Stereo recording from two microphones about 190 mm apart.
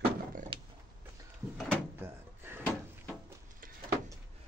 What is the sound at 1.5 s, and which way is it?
Speech, 5° left (ahead or behind).